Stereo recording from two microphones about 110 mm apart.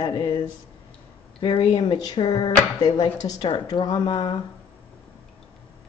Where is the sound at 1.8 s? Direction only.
35° left (ahead or behind).